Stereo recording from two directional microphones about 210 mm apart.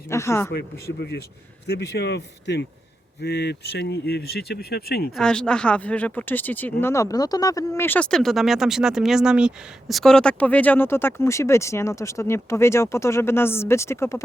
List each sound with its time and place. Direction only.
0.1 s speech: 15° left (ahead or behind)
0.5 s speech: 50° left (ahead or behind)
5.1 s speech: 5° left (ahead or behind)